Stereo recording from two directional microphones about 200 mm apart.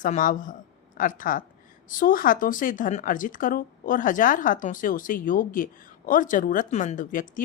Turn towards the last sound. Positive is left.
turn(degrees=40)  # may be behind; listen again after turning